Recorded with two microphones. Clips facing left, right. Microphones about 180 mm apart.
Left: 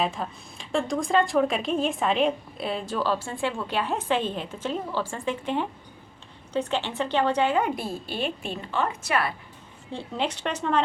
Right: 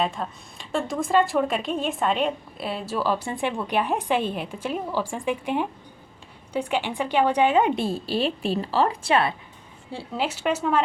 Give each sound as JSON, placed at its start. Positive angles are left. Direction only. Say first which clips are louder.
{"t": 0.0, "sound": "a woman's voice", "louder": "right 1 dB", "side_deg": 0}
{"t": 9.9, "sound": "speech", "louder": "right 1 dB", "side_deg": -5}